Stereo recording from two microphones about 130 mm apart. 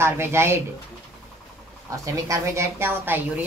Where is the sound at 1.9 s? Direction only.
25° right (ahead or behind).